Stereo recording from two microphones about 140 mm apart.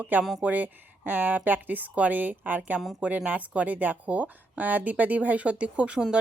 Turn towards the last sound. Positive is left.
turn(degrees=-5)  # may be behind; listen again after turning